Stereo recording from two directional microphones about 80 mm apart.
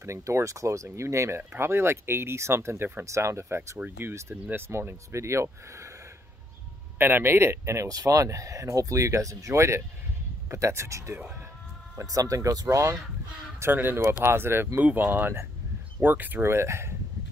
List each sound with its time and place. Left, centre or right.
0.0 s speech: right
3.7 s speech: centre
4.1 s speech: right
7.0 s speech: right
13.6 s speech: right